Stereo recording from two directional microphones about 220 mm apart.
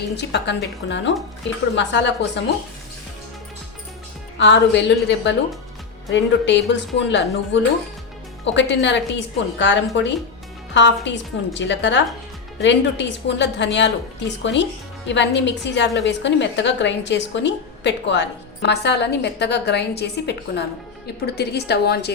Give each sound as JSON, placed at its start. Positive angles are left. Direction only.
{"t": 0.2, "sound": "a woman's voice", "side_deg": 50}
{"t": 4.4, "sound": "a woman's voice", "side_deg": 55}